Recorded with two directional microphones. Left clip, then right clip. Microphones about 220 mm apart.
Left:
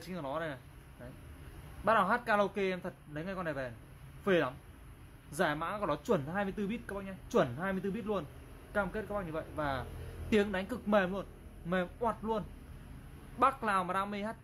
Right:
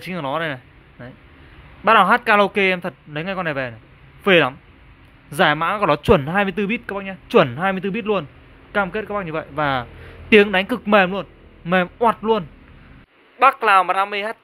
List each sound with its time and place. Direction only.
0.0 s speech: 40° right (ahead or behind)
1.9 s speech: 40° right (ahead or behind)